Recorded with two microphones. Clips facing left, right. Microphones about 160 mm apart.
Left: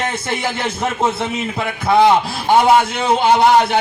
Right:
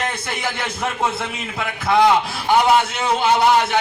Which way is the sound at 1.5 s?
30° left (ahead or behind).